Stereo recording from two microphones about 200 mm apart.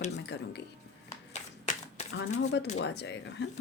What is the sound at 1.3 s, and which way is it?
Shuffling cards, 35° left (ahead or behind).